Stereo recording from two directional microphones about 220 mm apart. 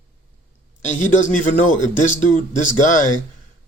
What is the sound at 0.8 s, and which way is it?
A man's voice, 35° left (ahead or behind).